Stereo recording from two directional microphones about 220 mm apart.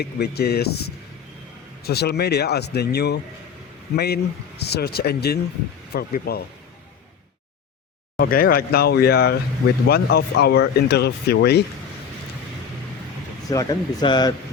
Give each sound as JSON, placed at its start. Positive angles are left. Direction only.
{"t": 0.0, "sound": "speech", "side_deg": 45}
{"t": 8.2, "sound": "speech", "side_deg": 40}
{"t": 13.5, "sound": "speech", "side_deg": 15}